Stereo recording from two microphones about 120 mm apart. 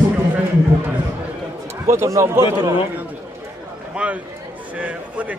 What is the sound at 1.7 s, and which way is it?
A man's voice, 25° right (ahead or behind).